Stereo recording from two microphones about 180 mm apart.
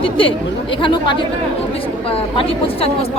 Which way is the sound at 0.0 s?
30° left (ahead or behind).